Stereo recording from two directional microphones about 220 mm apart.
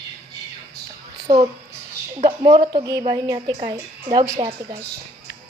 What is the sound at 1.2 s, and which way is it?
A woman's voice, 15° right (ahead or behind).